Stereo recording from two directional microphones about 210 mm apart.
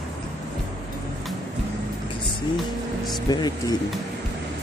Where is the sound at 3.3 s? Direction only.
20° left (ahead or behind).